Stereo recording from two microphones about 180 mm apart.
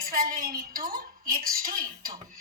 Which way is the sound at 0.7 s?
50° right (ahead or behind).